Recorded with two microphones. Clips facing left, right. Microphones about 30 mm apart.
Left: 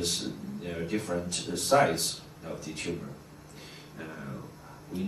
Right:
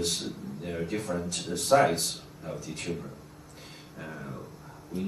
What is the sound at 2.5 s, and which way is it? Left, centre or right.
Speech, left.